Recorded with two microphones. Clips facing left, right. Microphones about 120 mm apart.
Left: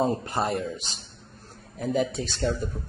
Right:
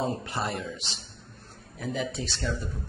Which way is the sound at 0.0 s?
40° left (ahead or behind).